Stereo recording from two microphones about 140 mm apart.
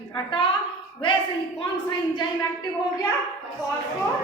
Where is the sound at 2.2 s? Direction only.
30° left (ahead or behind).